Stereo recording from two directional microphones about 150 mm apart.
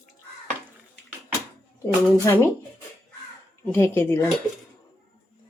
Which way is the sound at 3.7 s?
15° left (ahead or behind).